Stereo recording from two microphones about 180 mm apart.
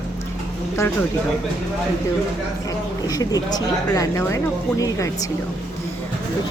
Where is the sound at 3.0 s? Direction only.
20° left (ahead or behind).